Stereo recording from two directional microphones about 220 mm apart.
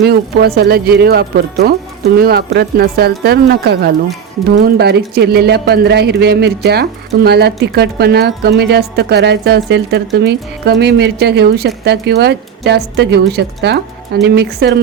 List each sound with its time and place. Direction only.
0.0 s speech: 45° right (ahead or behind)